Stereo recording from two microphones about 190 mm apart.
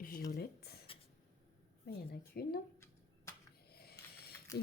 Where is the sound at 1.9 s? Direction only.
60° left (ahead or behind).